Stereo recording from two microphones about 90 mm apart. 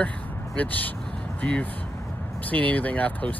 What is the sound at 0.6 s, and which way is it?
Speech, 20° left (ahead or behind).